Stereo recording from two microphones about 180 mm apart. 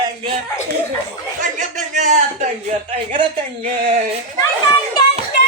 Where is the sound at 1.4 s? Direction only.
45° right (ahead or behind).